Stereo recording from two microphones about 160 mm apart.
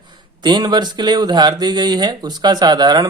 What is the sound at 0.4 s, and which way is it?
Speech, 25° right (ahead or behind).